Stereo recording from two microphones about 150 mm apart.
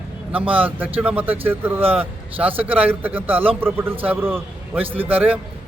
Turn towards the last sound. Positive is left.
turn(degrees=-10)  # may be behind; listen again after turning